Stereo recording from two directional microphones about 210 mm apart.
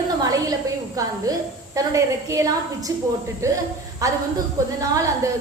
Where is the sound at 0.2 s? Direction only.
15° right (ahead or behind).